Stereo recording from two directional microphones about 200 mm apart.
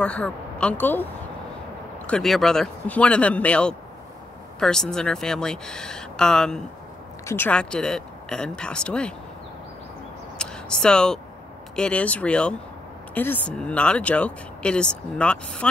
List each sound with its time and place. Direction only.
0.0 s speech: 5° left (ahead or behind)
2.0 s speech: 5° left (ahead or behind)
10.4 s a sound: 5° left (ahead or behind)
11.7 s speech: 5° left (ahead or behind)